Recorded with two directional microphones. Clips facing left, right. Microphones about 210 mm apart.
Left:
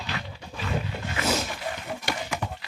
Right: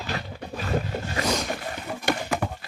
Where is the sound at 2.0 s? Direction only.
55° right (ahead or behind).